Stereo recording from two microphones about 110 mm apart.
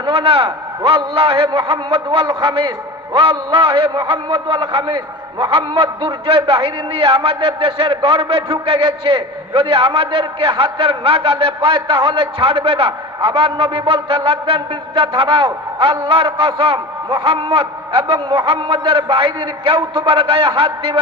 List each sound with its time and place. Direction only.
0.0 s a man's voice: 55° right (ahead or behind)